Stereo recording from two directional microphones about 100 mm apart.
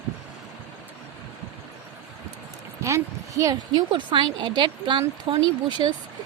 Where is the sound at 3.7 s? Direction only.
50° right (ahead or behind).